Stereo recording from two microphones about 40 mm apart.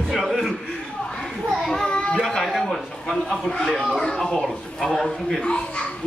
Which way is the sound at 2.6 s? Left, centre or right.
Centre.